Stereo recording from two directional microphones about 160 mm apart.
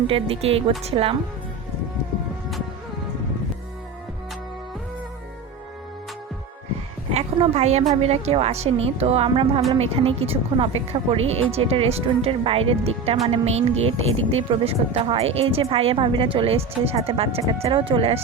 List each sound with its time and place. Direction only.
0.1 s speech: 35° right (ahead or behind)
7.1 s speech: 40° right (ahead or behind)